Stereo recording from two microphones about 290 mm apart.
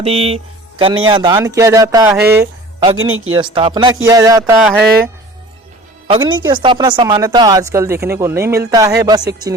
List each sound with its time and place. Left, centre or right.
0.0 s a woman's voice: centre
6.1 s a woman's voice: centre